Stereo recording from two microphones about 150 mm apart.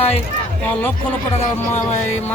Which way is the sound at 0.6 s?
10° left (ahead or behind).